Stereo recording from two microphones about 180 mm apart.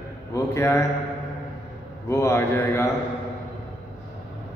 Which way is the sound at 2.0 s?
15° left (ahead or behind).